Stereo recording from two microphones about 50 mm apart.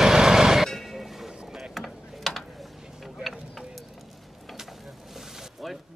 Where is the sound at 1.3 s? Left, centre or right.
Centre.